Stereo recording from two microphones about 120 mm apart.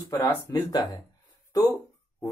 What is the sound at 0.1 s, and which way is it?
Speech, 30° left (ahead or behind).